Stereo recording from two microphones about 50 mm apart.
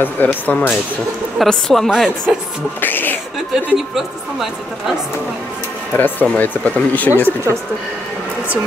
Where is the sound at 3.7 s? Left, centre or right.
Centre.